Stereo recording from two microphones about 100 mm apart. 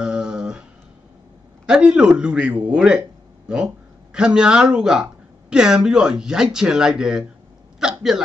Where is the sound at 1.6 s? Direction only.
10° right (ahead or behind).